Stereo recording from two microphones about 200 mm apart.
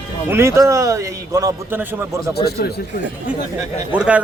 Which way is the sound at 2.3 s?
55° left (ahead or behind).